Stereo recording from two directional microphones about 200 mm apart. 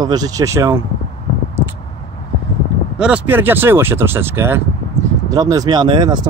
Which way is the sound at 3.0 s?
10° right (ahead or behind).